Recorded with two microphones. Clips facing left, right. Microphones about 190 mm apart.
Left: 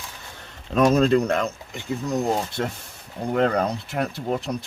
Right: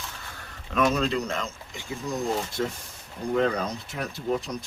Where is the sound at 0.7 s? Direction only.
40° left (ahead or behind); by 4.0 s 60° left (ahead or behind).